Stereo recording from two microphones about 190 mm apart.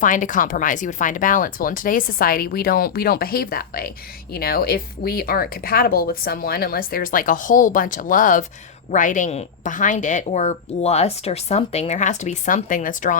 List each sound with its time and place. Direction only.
0.0 s a woman's voice: 45° left (ahead or behind)